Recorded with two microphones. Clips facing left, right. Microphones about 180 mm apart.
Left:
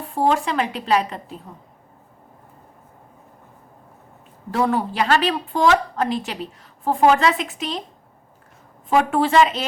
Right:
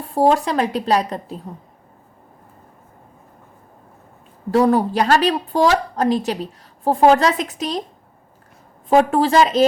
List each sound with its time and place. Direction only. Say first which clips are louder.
0.1 s a woman's voice: right 4 dB; 35° right (ahead or behind)
4.5 s a woman's voice: right 5 dB; 40° right (ahead or behind)
8.9 s a woman's voice: right 3 dB; 40° right (ahead or behind)